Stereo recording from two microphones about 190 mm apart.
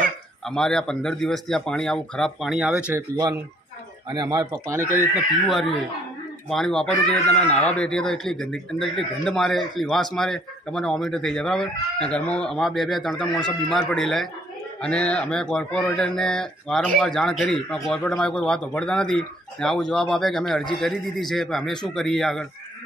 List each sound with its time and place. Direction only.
0.5 s speech: 5° left (ahead or behind)
4.1 s speech: 20° right (ahead or behind)
5.1 s speech: centre (ahead or behind)